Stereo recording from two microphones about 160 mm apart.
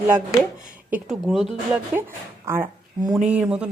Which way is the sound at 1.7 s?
15° right (ahead or behind).